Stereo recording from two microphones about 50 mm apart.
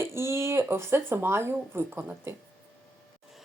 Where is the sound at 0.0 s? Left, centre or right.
Right.